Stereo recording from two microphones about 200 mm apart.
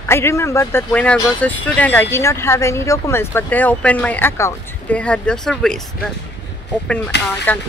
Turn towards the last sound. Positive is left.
turn(degrees=60)  # may be behind; listen again after turning